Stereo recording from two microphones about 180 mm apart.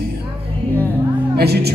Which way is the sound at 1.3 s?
65° right (ahead or behind).